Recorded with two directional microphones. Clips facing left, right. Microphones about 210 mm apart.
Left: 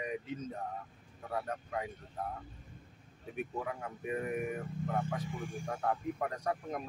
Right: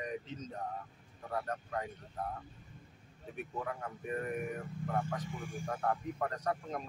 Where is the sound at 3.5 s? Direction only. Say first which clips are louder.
Left 1 dB; 10° left (ahead or behind).